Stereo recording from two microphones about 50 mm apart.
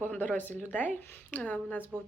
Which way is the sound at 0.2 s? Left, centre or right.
Left.